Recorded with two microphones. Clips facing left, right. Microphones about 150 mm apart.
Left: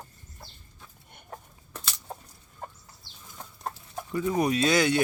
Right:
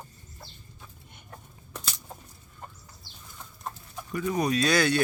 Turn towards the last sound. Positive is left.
turn(degrees=20)  # may be behind; listen again after turning